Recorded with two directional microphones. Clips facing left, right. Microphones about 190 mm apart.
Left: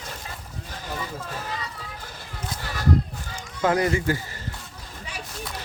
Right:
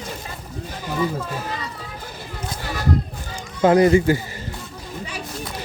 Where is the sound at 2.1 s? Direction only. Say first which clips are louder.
Right 4 dB; 10° right (ahead or behind).